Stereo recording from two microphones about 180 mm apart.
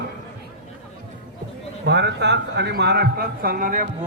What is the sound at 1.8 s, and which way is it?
A man's voice, 70° right (ahead or behind).